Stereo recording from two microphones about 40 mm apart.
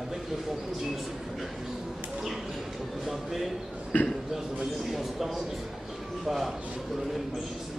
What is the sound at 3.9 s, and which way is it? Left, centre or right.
Speech, left.